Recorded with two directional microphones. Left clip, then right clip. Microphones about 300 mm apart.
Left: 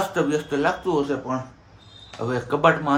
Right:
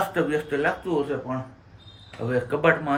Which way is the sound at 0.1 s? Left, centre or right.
Centre.